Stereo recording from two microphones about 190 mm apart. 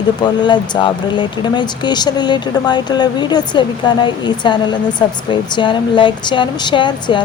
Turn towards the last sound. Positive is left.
turn(degrees=25)  # may be behind; listen again after turning